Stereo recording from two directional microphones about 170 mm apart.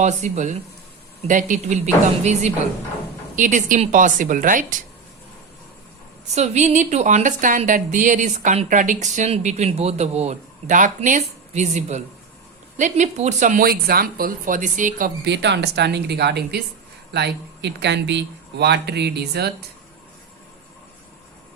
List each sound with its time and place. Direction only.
0.0 s a woman's voice: 45° right (ahead or behind)
6.3 s a woman's voice: 40° right (ahead or behind)
15.2 s speech: 90° right; by 16.6 s 75° right (ahead or behind)
17.1 s speech: 85° right; by 19.5 s 70° right (ahead or behind)